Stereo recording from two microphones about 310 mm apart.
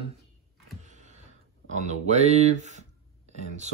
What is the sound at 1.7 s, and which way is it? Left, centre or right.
Speech, right.